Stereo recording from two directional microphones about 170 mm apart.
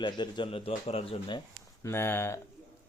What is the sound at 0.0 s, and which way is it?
A man's voice, 30° left (ahead or behind).